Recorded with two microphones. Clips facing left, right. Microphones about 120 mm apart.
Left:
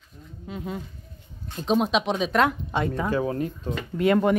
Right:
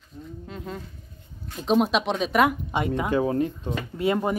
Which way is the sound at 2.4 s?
15° right (ahead or behind).